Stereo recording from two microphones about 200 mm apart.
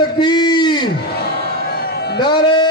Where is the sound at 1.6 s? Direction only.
50° left (ahead or behind).